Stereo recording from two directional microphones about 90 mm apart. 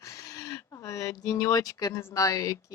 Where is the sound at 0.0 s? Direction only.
35° left (ahead or behind).